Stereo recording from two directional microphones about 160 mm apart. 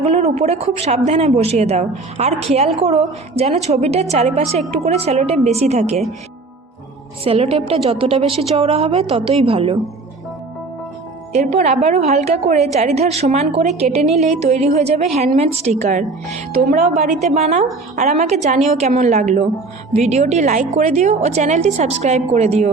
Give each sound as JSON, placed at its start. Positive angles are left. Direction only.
{"t": 0.0, "sound": "speech", "side_deg": -40}
{"t": 7.3, "sound": "speech", "side_deg": -35}
{"t": 11.3, "sound": "a woman's voice", "side_deg": -40}